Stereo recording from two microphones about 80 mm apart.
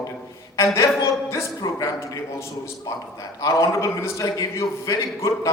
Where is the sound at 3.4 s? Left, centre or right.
Left.